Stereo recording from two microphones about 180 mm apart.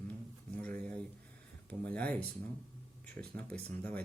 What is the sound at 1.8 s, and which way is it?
Speech, 5° left (ahead or behind).